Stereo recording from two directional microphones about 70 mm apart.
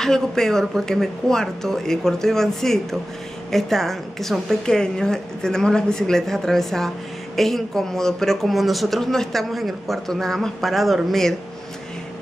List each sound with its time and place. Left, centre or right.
0.0 s speech: centre